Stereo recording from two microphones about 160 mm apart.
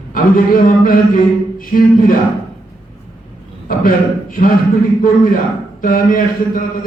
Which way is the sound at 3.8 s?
60° left (ahead or behind).